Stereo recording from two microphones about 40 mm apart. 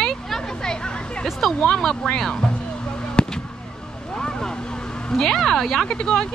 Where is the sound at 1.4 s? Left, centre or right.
Centre.